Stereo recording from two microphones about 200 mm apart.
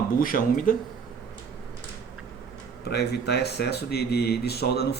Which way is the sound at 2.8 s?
55° left (ahead or behind).